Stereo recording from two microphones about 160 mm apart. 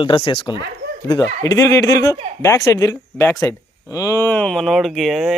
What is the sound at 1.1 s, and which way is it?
A man's voice, 15° left (ahead or behind).